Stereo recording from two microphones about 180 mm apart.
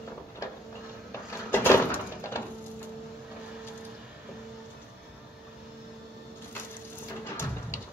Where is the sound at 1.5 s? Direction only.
10° left (ahead or behind).